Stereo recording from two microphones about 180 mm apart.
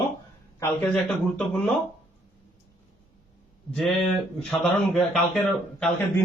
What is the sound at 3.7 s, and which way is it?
A man's voice, 5° left (ahead or behind).